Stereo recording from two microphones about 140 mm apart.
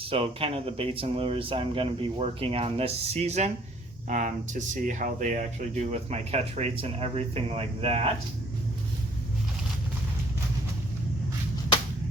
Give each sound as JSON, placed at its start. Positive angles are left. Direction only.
{"t": 0.0, "sound": "speech", "side_deg": -40}
{"t": 4.7, "sound": "speech", "side_deg": -65}